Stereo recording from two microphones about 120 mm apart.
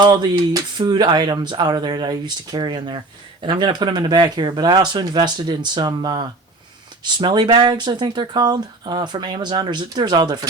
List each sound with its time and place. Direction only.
0.0 s speech: 35° right (ahead or behind)